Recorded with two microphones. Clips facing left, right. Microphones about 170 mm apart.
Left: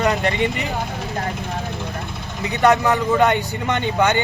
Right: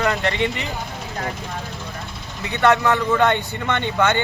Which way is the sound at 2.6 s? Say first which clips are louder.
Left 1 dB; 15° left (ahead or behind).